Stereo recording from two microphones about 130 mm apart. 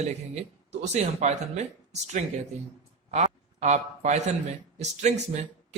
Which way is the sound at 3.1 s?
60° right (ahead or behind).